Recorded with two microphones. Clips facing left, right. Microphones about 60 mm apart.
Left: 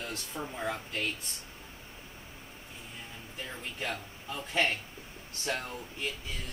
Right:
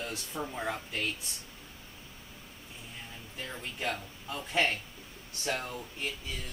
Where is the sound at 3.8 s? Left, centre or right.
Centre.